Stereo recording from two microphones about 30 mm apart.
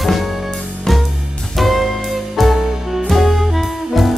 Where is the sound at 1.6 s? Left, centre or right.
Centre.